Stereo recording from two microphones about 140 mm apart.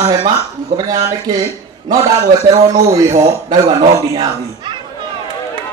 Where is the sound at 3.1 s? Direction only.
30° right (ahead or behind).